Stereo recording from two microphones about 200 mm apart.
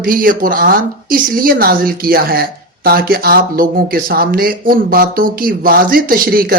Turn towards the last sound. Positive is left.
turn(degrees=-45)  # may be behind; listen again after turning